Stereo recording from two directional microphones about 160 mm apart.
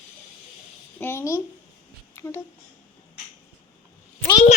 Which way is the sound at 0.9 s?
15° left (ahead or behind).